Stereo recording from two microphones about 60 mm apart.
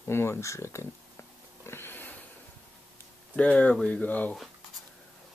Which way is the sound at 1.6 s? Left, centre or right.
Left.